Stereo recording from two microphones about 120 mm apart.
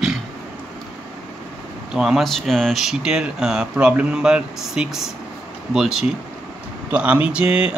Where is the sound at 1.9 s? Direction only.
5° right (ahead or behind).